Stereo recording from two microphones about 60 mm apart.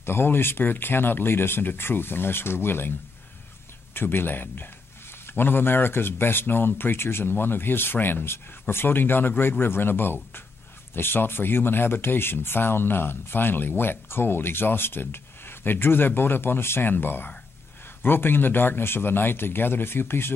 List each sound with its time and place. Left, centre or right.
0.0 s speech: left
3.9 s speech: left